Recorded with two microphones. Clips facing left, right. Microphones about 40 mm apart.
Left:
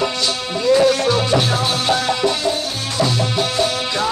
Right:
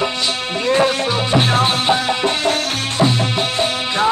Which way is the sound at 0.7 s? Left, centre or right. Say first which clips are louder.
Left 2 dB; right.